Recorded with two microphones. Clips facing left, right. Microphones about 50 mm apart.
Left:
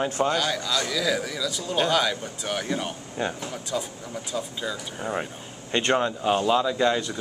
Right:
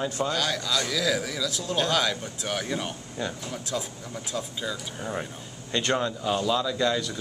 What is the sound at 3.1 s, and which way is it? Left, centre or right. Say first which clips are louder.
Speech: left 4 dB; left.